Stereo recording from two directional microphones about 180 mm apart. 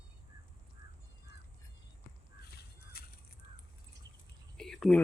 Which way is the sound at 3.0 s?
60° left (ahead or behind).